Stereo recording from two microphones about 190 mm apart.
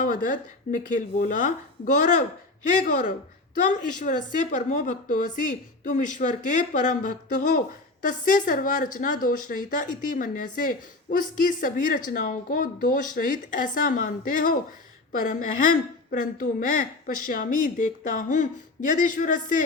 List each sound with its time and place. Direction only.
0.0 s a woman's voice: 45° left (ahead or behind)